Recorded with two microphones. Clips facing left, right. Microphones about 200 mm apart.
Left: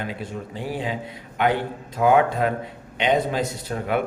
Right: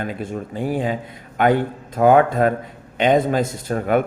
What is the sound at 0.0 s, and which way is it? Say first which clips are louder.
A man's voice: right 4 dB; 50° right (ahead or behind).